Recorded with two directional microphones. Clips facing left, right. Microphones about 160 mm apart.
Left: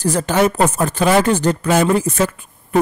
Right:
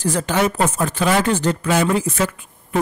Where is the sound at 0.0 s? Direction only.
45° left (ahead or behind).